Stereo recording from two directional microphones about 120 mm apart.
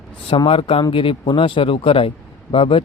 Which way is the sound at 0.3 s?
50° left (ahead or behind).